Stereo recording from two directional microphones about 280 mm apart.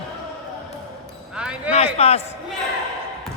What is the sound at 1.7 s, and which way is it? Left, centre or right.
Speech, left.